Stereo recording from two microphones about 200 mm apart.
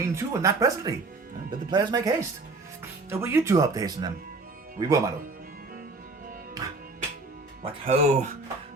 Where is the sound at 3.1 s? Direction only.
10° right (ahead or behind).